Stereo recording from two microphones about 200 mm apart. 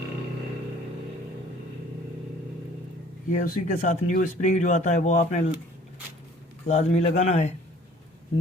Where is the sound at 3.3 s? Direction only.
45° left (ahead or behind).